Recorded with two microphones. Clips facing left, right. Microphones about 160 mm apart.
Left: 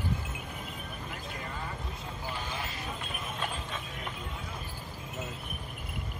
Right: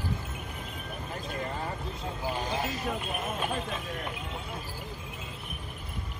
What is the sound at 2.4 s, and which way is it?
Clip-clop, 40° right (ahead or behind).